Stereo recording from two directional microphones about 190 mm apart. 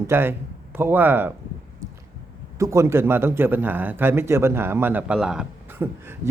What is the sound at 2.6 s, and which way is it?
A man's voice, 15° right (ahead or behind).